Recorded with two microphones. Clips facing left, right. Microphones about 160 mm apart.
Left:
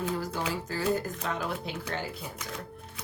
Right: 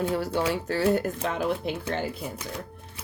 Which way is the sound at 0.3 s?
70° right (ahead or behind).